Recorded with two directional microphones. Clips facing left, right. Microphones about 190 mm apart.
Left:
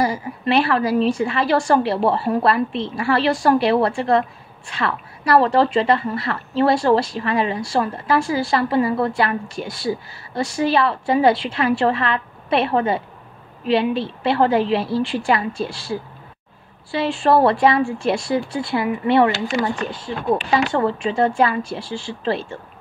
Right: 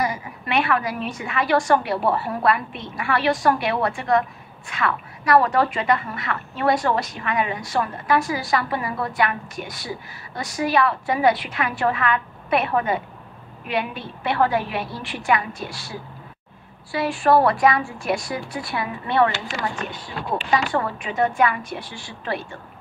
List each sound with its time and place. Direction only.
0.0 s a woman's voice: 30° left (ahead or behind)